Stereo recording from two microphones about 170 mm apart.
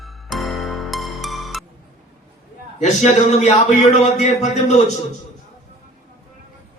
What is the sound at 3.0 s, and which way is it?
A man's voice, 45° left (ahead or behind).